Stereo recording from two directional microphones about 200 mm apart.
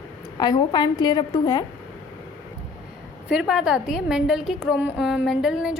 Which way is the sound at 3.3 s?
5° right (ahead or behind).